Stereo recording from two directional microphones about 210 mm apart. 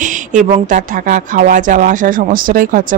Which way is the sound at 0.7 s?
35° right (ahead or behind).